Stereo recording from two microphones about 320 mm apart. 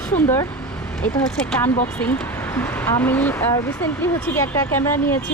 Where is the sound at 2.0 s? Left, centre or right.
Centre.